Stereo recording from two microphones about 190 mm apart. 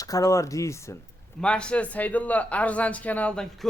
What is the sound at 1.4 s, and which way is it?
Speech, 5° left (ahead or behind).